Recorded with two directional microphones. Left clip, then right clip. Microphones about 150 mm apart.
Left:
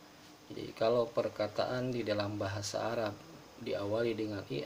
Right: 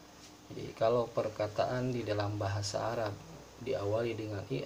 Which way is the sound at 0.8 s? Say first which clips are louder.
Even; 50° left (ahead or behind).